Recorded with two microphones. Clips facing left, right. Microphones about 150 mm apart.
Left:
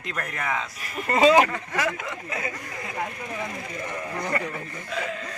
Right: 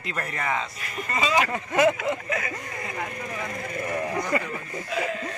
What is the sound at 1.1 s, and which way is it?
Speech, 70° left (ahead or behind).